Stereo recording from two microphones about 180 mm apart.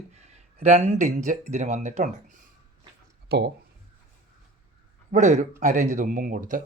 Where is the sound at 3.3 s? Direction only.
60° right (ahead or behind).